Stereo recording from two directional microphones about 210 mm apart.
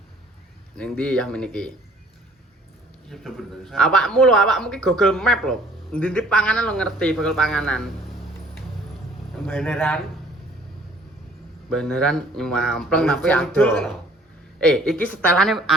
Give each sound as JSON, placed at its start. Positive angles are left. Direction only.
{"t": 0.8, "sound": "speech", "side_deg": 5}
{"t": 3.1, "sound": "speech", "side_deg": 0}
{"t": 9.5, "sound": "speech", "side_deg": 10}
{"t": 11.7, "sound": "speech", "side_deg": 5}